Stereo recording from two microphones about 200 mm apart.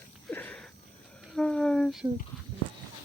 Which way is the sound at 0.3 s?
10° left (ahead or behind).